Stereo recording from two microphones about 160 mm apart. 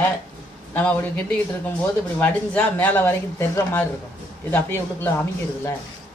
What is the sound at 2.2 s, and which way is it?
Speech, 10° left (ahead or behind).